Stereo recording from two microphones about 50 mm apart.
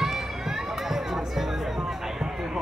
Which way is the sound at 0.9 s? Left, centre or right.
Centre.